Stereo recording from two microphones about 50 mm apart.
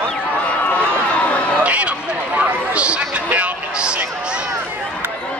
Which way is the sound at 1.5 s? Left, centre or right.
Right.